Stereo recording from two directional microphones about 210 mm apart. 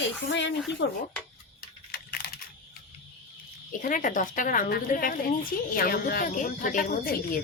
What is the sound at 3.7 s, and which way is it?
A woman's voice, 40° left (ahead or behind).